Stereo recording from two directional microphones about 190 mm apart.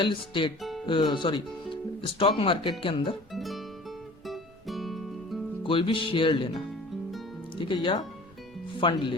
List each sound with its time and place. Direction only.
0.0 s speech: 25° left (ahead or behind)
0.6 s music: centre (ahead or behind)
0.9 s speech: 25° left (ahead or behind)
3.3 s music: centre (ahead or behind)
5.6 s speech: 25° left (ahead or behind)